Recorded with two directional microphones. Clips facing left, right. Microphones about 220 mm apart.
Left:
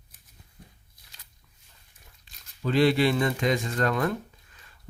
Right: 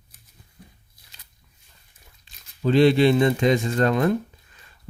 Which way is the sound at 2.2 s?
25° right (ahead or behind).